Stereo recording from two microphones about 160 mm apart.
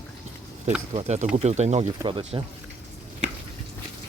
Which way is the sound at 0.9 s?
45° right (ahead or behind).